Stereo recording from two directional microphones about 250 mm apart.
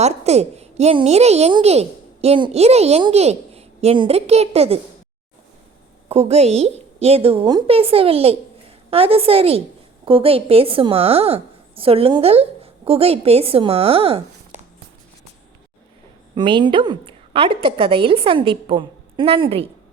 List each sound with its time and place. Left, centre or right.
0.0 s a woman's voice: right
6.1 s a woman's voice: right
16.3 s a woman's voice: centre